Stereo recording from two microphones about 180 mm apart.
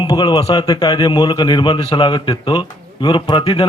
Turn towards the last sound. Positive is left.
turn(degrees=30)  # may be behind; listen again after turning